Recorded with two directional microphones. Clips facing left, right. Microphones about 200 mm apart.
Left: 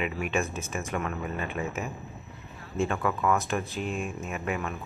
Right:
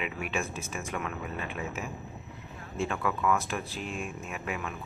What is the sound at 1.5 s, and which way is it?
Speech, 50° left (ahead or behind).